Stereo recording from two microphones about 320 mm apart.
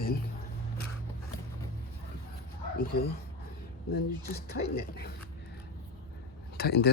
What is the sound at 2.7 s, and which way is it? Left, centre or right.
Speech, left.